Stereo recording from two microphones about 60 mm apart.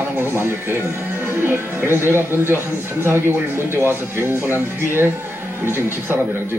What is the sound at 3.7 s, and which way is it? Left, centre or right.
Speech, right.